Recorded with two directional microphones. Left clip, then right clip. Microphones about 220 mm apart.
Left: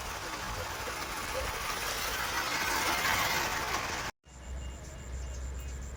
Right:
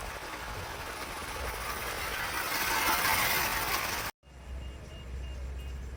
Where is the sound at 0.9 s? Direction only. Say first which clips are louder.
Left 3 dB; 25° left (ahead or behind); by 4.1 s 45° right (ahead or behind).